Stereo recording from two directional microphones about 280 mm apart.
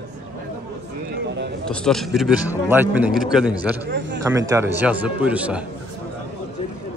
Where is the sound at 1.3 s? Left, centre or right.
Right.